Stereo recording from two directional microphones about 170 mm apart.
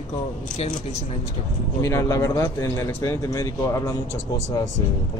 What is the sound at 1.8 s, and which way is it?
A man's voice, 15° left (ahead or behind).